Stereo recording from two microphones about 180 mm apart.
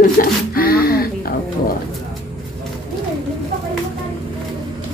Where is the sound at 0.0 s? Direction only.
50° left (ahead or behind).